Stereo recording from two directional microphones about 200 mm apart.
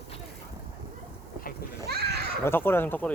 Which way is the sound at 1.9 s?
55° right (ahead or behind).